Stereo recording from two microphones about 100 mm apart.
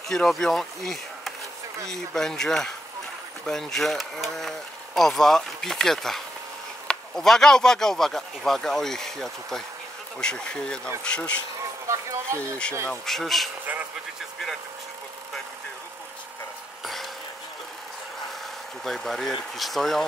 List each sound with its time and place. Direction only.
0.1 s speech: 5° left (ahead or behind)
11.9 s speech: 30° right (ahead or behind)
13.0 s speech: centre (ahead or behind)
16.8 s a sound: centre (ahead or behind)
18.9 s speech: 5° left (ahead or behind)